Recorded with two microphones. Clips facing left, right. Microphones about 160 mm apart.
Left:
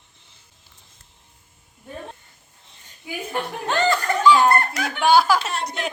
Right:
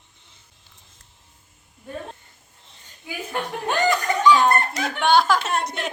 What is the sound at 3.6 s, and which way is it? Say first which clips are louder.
Chuckle: even; 15° right (ahead or behind).